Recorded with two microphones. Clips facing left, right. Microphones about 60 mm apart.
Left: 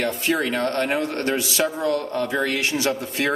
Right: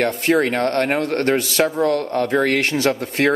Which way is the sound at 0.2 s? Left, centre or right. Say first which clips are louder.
Right 5 dB; right.